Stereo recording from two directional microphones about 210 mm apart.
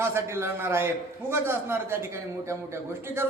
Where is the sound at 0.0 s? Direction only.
10° right (ahead or behind).